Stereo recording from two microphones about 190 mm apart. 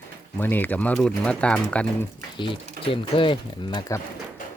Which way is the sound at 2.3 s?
25° left (ahead or behind).